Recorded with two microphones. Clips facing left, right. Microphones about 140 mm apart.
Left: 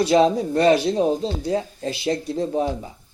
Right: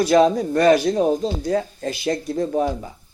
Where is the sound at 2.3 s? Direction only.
30° left (ahead or behind).